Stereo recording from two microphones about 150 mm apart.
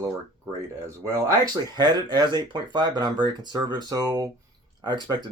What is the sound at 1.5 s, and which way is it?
Speech, 30° right (ahead or behind).